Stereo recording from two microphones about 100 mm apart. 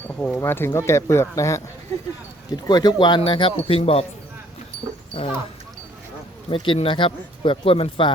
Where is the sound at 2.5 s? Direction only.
45° left (ahead or behind).